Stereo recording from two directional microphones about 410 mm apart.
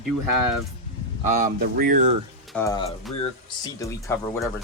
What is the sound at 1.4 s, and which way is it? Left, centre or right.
Speech, right.